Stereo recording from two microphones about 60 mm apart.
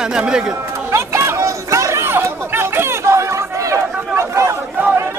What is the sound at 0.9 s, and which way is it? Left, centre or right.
Chatter, right.